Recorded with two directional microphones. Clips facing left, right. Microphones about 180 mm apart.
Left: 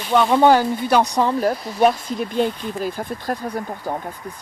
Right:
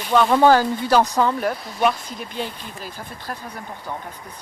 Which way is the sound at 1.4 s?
40° left (ahead or behind).